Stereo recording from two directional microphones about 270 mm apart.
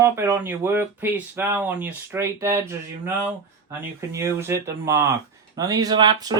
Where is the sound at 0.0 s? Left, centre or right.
Centre.